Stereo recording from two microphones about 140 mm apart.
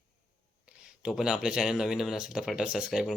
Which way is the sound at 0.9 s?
5° right (ahead or behind).